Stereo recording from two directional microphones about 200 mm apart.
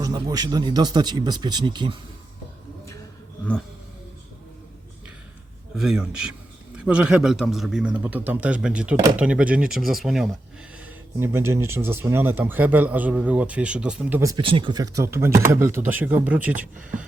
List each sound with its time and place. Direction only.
0.0 s speech: 20° right (ahead or behind)
5.7 s a man's voice: centre (ahead or behind)
10.8 s speech: 10° right (ahead or behind)